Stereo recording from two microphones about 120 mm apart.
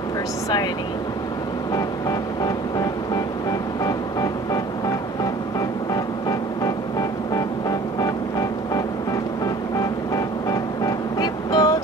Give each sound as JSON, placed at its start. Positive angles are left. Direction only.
{"t": 6.2, "sound": "vehicle", "side_deg": 30}
{"t": 9.8, "sound": "music", "side_deg": 30}